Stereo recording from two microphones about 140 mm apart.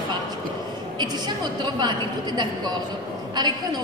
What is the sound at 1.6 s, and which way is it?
A woman's voice, 30° right (ahead or behind).